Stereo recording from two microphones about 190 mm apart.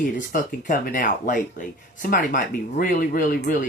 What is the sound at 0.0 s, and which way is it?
Speech, 50° left (ahead or behind).